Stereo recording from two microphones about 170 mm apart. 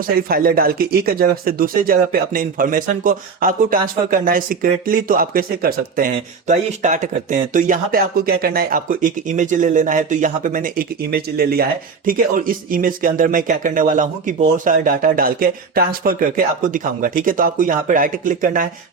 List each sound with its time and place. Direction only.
0.0 s speech: 60° right (ahead or behind)
6.5 s speech: 45° right (ahead or behind)